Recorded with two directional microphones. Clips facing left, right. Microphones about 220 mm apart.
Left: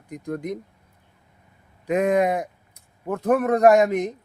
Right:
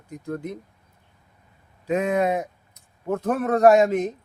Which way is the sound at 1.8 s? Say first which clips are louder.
Left 2 dB; 15° left (ahead or behind).